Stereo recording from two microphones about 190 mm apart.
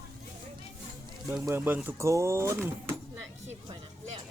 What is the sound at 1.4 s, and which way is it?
Speech, 10° right (ahead or behind).